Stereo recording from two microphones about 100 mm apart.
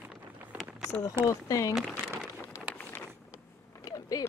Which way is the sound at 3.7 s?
35° left (ahead or behind).